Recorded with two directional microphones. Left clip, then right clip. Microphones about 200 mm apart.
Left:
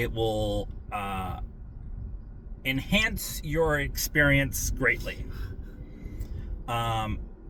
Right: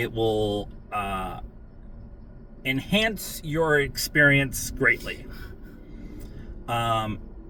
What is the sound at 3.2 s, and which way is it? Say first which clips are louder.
Speech: right 2 dB; 20° left (ahead or behind).